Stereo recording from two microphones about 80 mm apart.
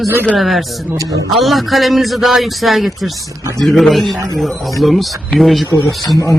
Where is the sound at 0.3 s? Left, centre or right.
Centre.